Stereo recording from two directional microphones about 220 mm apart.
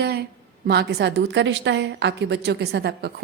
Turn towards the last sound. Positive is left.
turn(degrees=-50)  # may be behind; listen again after turning